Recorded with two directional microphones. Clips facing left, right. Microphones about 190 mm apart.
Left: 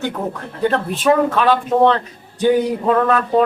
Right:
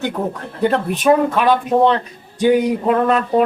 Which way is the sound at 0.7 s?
15° right (ahead or behind).